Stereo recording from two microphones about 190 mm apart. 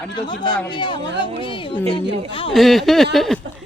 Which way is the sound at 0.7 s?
25° left (ahead or behind).